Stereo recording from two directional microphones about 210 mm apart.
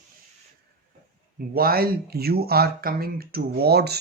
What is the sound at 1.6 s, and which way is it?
Speech, 45° right (ahead or behind).